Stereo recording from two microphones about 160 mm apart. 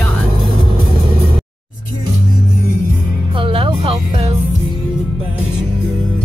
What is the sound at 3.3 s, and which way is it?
Music, 35° right (ahead or behind).